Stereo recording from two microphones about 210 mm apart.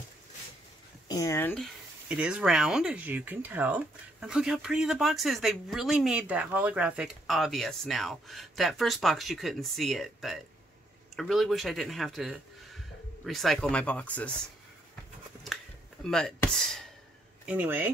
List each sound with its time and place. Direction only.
1.0 s speech: 15° left (ahead or behind)
15.4 s a sound: centre (ahead or behind)
17.5 s speech: 10° right (ahead or behind)